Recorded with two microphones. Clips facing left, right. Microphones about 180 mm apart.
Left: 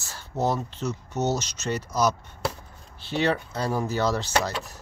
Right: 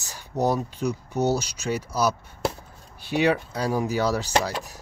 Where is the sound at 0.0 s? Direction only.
15° right (ahead or behind).